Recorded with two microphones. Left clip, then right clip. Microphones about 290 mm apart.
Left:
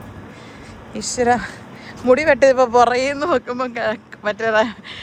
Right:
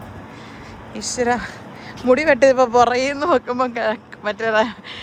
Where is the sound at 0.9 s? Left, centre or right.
Centre.